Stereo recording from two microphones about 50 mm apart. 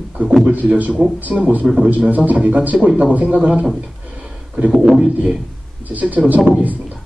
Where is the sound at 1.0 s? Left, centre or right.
Centre.